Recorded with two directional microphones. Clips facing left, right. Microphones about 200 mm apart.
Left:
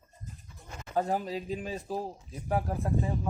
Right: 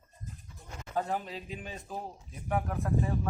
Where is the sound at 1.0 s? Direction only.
35° left (ahead or behind).